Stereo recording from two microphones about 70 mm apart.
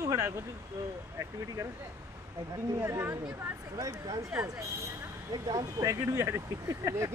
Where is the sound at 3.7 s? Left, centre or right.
Right.